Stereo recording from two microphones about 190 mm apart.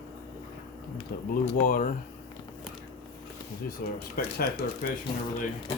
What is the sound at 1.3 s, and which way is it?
Speech, 55° left (ahead or behind).